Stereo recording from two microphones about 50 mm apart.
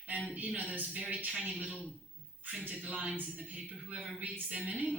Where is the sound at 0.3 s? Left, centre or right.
Right.